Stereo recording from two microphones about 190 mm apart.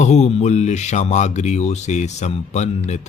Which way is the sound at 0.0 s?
35° left (ahead or behind).